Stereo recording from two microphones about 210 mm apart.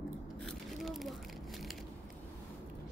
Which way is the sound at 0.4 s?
Centre (ahead or behind).